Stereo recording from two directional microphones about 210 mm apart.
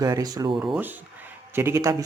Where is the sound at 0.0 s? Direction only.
15° right (ahead or behind).